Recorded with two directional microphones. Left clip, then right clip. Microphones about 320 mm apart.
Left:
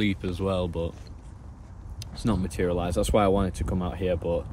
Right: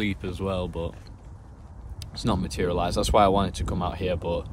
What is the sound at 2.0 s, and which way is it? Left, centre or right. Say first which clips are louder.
Speech: right 2 dB; centre.